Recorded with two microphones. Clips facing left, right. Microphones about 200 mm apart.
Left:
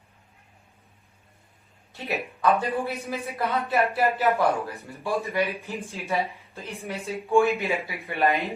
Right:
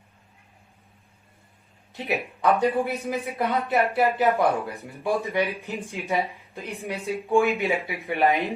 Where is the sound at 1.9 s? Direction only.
15° right (ahead or behind).